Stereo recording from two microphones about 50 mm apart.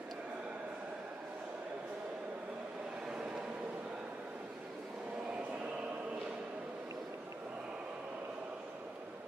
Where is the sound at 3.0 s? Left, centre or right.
Centre.